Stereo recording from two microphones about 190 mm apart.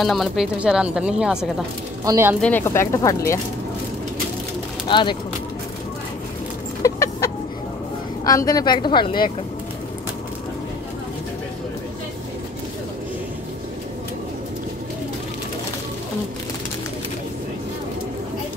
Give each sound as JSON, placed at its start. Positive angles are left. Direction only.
{"t": 0.0, "sound": "speech", "side_deg": 0}
{"t": 2.0, "sound": "speech", "side_deg": -15}
{"t": 2.4, "sound": "speech", "side_deg": 10}
{"t": 4.8, "sound": "speech", "side_deg": 25}
{"t": 6.8, "sound": "chicken", "side_deg": 15}
{"t": 8.2, "sound": "a woman's voice", "side_deg": 20}